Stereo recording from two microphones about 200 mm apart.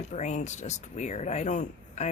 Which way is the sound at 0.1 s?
35° left (ahead or behind).